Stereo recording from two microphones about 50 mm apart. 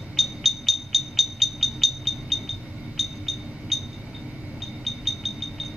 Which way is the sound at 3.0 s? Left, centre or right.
Centre.